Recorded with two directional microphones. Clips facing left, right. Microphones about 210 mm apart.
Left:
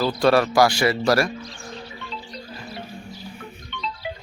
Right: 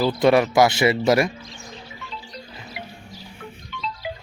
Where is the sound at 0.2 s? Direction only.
20° right (ahead or behind).